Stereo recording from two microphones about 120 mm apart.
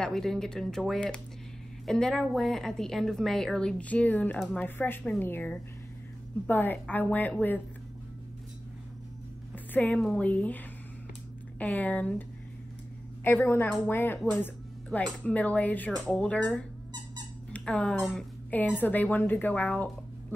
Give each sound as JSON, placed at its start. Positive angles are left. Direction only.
{"t": 0.0, "sound": "a woman's voice", "side_deg": 5}
{"t": 9.8, "sound": "speech", "side_deg": 15}